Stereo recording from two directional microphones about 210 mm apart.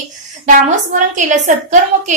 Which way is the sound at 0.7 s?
35° right (ahead or behind).